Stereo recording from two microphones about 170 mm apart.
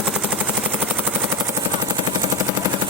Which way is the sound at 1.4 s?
20° right (ahead or behind).